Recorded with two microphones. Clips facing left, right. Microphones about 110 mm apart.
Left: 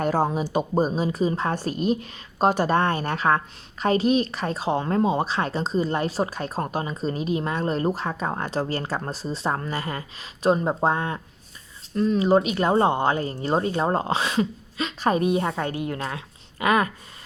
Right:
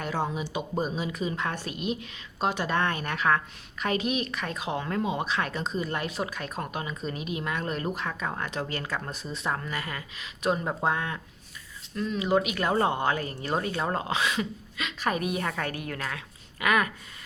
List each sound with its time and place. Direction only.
0.0 s speech: 40° left (ahead or behind)